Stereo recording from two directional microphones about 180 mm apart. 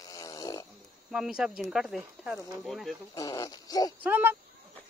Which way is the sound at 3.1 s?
20° left (ahead or behind).